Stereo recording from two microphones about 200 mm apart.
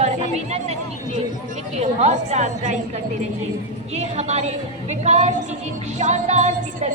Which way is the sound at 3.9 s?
35° right (ahead or behind).